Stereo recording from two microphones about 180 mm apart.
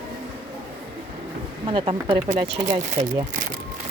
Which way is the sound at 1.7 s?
30° right (ahead or behind).